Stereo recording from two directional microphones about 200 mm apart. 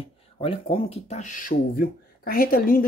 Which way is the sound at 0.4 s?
30° left (ahead or behind).